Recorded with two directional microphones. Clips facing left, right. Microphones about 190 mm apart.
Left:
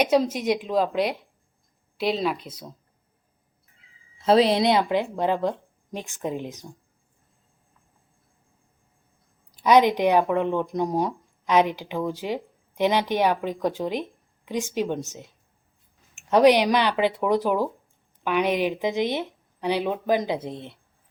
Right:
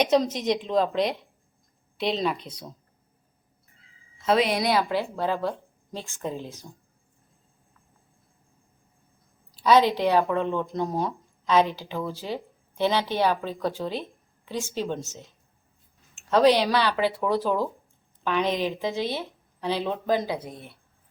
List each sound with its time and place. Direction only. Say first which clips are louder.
0.0 s speech: left 1 dB; 5° left (ahead or behind)
4.3 s a woman's voice: left 4 dB; 30° left (ahead or behind); by 6.7 s 15° left (ahead or behind)
9.5 s speech: left 2 dB; 15° left (ahead or behind)